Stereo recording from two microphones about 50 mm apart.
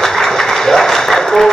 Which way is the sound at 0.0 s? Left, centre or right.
Centre.